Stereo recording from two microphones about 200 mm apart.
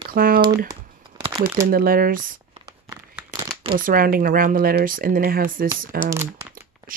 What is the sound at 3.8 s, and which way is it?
Speech, 45° right (ahead or behind).